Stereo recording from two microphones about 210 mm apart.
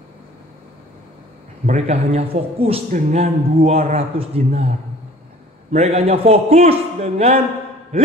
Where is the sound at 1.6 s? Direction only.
30° right (ahead or behind).